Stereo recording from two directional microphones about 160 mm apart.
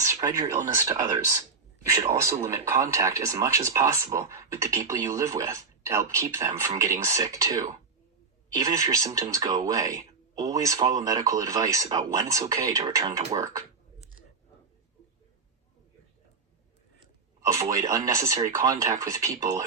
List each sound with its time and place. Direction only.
0.0 s speech: 20° right (ahead or behind)
17.4 s speech: 20° right (ahead or behind)